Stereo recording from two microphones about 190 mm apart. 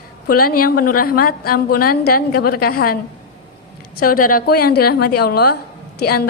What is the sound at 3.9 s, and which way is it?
A woman's voice, 50° left (ahead or behind).